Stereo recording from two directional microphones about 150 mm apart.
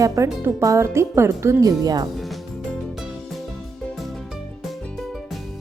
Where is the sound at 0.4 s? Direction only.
20° right (ahead or behind).